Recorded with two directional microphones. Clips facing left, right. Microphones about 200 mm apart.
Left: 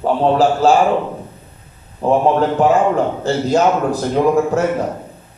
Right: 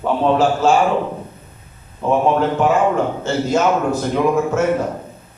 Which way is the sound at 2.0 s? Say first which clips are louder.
Left 3 dB; 35° left (ahead or behind).